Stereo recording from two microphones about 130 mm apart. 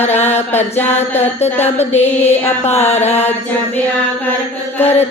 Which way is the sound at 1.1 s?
55° left (ahead or behind).